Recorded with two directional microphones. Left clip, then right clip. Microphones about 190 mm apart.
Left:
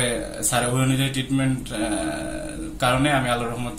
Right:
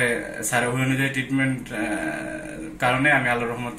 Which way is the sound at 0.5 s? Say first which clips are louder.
Even; 10° left (ahead or behind).